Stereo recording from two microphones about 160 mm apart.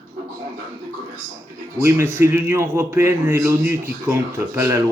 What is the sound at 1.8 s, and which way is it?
A man's voice, 15° right (ahead or behind).